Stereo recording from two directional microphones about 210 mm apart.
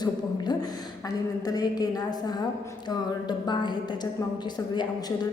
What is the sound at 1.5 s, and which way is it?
A woman's voice, 20° left (ahead or behind).